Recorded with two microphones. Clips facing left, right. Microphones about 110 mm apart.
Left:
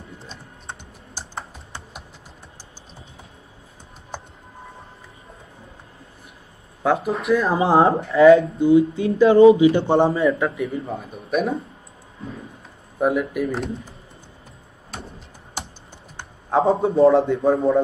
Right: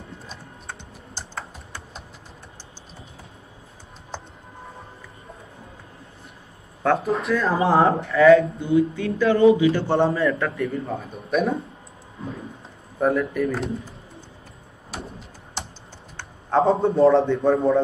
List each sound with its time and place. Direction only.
0.7 s typing: 20° left (ahead or behind)
6.8 s speech: 10° left (ahead or behind)
7.3 s speech: 25° left (ahead or behind)
10.5 s a man's voice: centre (ahead or behind)
13.0 s a man's voice: 5° left (ahead or behind)
14.9 s a sound: centre (ahead or behind)
16.2 s typing: 15° left (ahead or behind)
16.7 s a man's voice: centre (ahead or behind)